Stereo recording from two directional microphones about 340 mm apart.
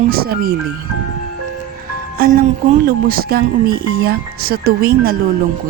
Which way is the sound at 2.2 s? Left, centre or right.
Right.